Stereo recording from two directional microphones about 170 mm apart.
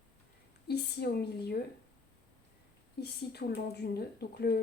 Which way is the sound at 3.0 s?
75° left (ahead or behind).